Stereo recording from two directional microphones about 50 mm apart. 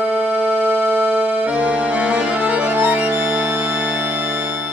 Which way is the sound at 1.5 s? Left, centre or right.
Right.